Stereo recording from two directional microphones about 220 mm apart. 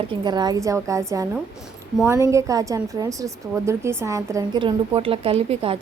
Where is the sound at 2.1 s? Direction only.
15° right (ahead or behind).